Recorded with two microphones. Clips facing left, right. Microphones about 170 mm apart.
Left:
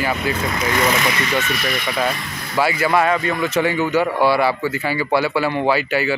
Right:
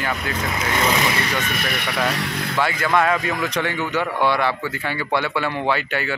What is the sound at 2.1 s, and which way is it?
Speech, 75° right (ahead or behind).